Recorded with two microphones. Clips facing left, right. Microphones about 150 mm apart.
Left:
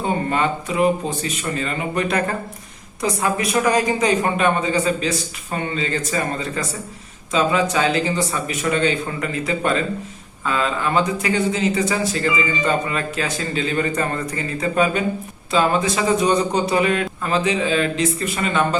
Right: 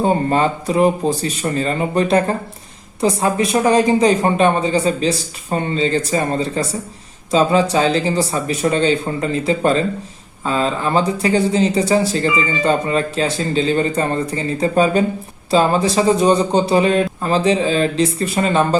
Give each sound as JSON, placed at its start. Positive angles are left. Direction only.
{"t": 0.0, "sound": "speech", "side_deg": -35}